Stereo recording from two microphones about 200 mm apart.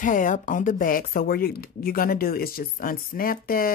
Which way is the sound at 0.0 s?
40° left (ahead or behind).